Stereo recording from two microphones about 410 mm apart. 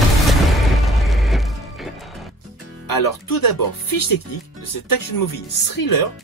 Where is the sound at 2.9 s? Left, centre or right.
Left.